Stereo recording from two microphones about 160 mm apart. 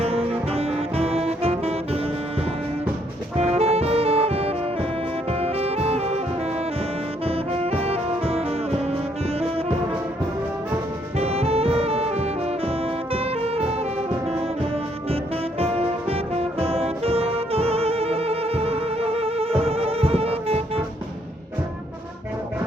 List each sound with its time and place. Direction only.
0.0 s music: 40° right (ahead or behind)
3.3 s music: 40° right (ahead or behind)
7.3 s music: 40° right (ahead or behind)
9.4 s brass instrument: 35° right (ahead or behind)
11.2 s music: 40° right (ahead or behind)
15.1 s music: 40° right (ahead or behind)